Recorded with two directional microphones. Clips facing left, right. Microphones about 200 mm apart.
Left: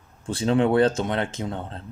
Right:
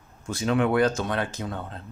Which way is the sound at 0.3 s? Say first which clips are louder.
Left 3 dB; 30° left (ahead or behind).